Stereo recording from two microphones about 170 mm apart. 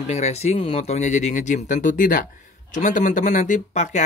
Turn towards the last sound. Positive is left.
turn(degrees=45)  # may be behind; listen again after turning